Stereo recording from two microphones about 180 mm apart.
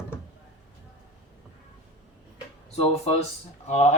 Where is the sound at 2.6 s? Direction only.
35° left (ahead or behind).